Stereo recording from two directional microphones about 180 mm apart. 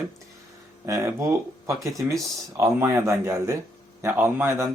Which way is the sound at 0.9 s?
15° right (ahead or behind).